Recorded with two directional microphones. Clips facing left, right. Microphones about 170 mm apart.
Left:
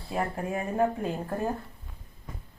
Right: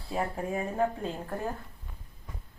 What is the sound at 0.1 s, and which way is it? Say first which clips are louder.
Speech: left 1 dB; 5° left (ahead or behind).